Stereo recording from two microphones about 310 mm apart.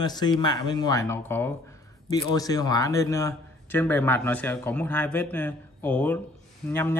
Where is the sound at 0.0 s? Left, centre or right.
Centre.